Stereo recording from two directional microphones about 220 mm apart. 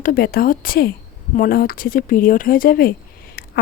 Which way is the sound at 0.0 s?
40° left (ahead or behind).